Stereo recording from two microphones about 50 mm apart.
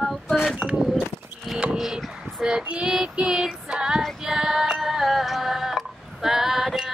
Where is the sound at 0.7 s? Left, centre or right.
Centre.